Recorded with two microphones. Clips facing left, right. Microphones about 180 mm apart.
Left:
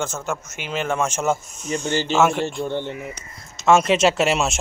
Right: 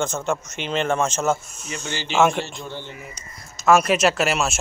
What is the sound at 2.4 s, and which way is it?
Speech, 55° left (ahead or behind).